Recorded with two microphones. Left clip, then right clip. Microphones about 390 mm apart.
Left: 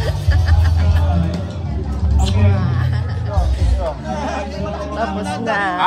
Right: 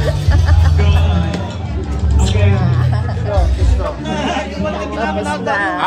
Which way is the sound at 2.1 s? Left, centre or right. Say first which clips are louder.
Right 3 dB; centre.